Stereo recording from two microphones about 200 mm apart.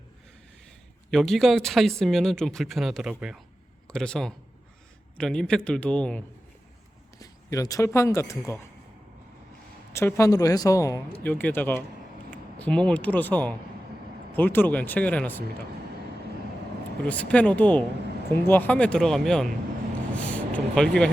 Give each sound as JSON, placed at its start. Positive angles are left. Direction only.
{"t": 1.1, "sound": "speech", "side_deg": 0}
{"t": 7.2, "sound": "speech", "side_deg": 15}
{"t": 9.9, "sound": "speech", "side_deg": 15}
{"t": 17.0, "sound": "speech", "side_deg": 5}